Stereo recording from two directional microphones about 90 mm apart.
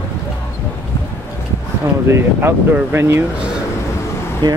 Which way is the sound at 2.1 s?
30° right (ahead or behind).